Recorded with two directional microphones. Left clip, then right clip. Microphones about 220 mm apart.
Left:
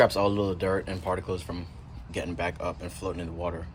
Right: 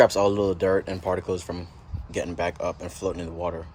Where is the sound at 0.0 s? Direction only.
25° right (ahead or behind).